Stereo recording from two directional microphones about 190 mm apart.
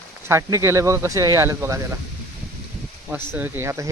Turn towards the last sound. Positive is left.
turn(degrees=-15)  # may be behind; listen again after turning